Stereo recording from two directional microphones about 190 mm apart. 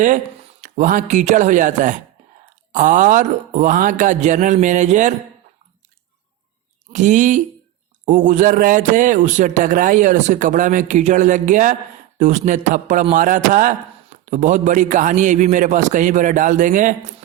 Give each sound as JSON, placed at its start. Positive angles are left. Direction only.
{"t": 0.6, "sound": "a man's voice", "side_deg": -45}
{"t": 6.9, "sound": "a man's voice", "side_deg": -40}